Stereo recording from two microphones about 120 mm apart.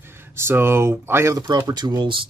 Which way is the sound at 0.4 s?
20° right (ahead or behind).